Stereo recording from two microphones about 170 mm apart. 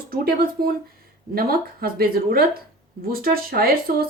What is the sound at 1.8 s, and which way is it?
A woman's voice, 60° right (ahead or behind).